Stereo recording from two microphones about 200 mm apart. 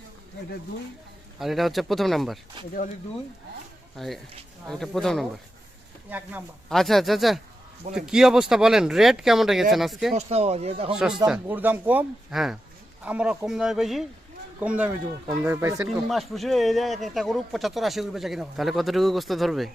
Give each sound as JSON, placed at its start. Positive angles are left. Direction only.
{"t": 1.4, "sound": "speech", "side_deg": 0}
{"t": 3.9, "sound": "speech", "side_deg": 0}
{"t": 10.2, "sound": "speech", "side_deg": -30}
{"t": 11.3, "sound": "speech", "side_deg": -10}
{"t": 15.9, "sound": "speech", "side_deg": 0}